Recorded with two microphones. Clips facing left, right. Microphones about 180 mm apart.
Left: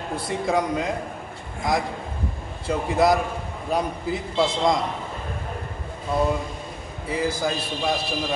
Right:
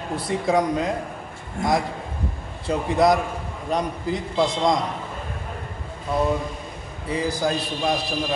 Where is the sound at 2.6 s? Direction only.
Centre (ahead or behind).